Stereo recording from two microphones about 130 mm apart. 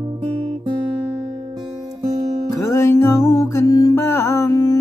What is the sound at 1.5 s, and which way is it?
Music, 30° right (ahead or behind).